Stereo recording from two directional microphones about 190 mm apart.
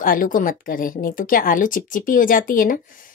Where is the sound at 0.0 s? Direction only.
45° left (ahead or behind).